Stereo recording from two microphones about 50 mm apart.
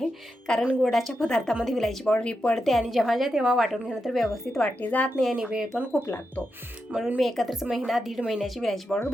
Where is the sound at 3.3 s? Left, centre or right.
Centre.